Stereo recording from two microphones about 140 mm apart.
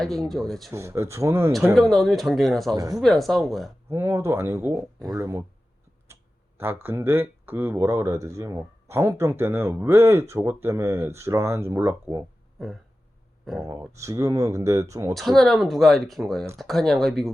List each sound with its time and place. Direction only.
0.0 s speech: centre (ahead or behind)
0.7 s speech: 20° right (ahead or behind)
1.7 s speech: centre (ahead or behind)
3.8 s speech: 20° right (ahead or behind)
6.6 s speech: 15° right (ahead or behind)
13.8 s speech: 20° right (ahead or behind)
15.1 s speech: centre (ahead or behind)